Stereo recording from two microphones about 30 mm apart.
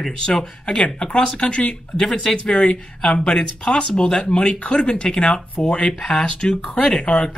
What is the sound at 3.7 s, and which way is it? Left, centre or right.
Speech, left.